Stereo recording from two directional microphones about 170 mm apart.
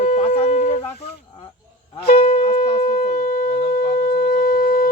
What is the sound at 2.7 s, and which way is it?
Shofar, 55° left (ahead or behind).